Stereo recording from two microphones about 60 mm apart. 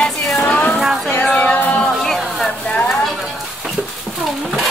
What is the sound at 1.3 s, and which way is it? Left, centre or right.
Music, left.